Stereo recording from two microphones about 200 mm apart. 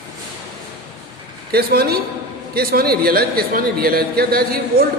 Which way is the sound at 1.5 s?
50° right (ahead or behind).